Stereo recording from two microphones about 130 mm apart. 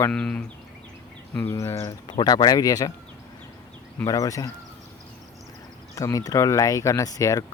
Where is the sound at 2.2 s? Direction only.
35° left (ahead or behind).